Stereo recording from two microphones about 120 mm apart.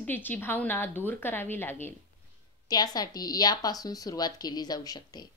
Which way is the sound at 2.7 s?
35° left (ahead or behind).